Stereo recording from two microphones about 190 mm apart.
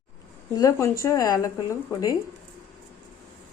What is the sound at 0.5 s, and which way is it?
Speech, 15° left (ahead or behind).